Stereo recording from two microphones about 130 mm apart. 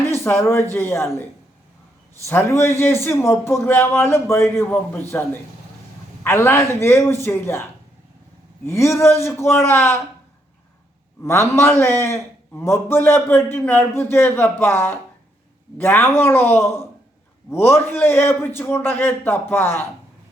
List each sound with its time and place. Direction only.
0.3 s a man's voice: 20° left (ahead or behind)
6.2 s a man's voice: 20° left (ahead or behind)
11.2 s a man's voice: 20° left (ahead or behind)